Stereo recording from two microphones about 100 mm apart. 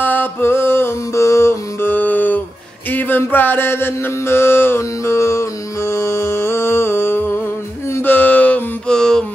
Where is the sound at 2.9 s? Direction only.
20° left (ahead or behind).